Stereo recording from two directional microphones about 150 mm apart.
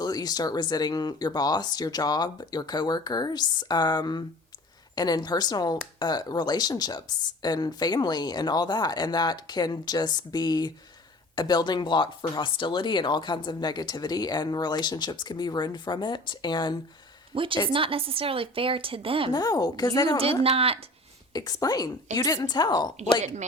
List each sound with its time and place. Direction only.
0.0 s speech: 25° left (ahead or behind)
17.3 s a woman's voice: 35° right (ahead or behind)
19.3 s speech: 25° left (ahead or behind)
20.4 s a woman's voice: 40° right (ahead or behind)
21.3 s speech: 25° left (ahead or behind)
23.2 s speech: 50° right (ahead or behind)